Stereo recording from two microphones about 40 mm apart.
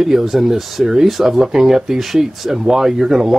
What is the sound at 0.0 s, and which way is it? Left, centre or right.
Speech, centre.